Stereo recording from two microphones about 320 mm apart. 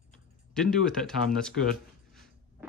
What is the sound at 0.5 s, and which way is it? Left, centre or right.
Speech, centre.